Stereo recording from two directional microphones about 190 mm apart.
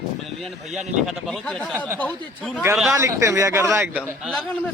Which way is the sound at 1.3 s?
5° left (ahead or behind).